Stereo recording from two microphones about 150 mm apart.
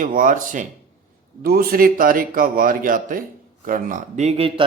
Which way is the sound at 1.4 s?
80° right.